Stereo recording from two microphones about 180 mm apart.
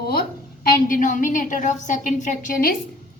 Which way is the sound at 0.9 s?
45° left (ahead or behind).